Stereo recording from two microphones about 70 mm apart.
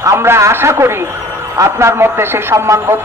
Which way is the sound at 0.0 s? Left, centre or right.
Right.